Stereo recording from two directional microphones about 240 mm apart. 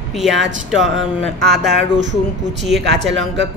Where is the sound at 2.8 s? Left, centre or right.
Right.